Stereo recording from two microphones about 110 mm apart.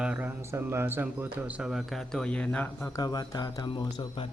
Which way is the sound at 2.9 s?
35° left (ahead or behind).